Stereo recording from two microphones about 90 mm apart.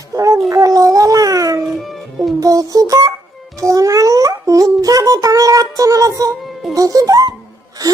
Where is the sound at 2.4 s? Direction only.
40° right (ahead or behind).